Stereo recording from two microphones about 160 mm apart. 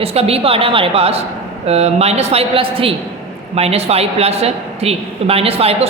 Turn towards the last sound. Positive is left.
turn(degrees=-40)  # may be behind; listen again after turning